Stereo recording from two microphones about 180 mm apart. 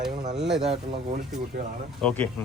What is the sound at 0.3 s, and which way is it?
Speech, 5° right (ahead or behind).